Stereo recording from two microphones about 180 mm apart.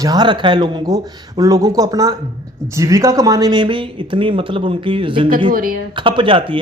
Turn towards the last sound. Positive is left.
turn(degrees=-30)  # may be behind; listen again after turning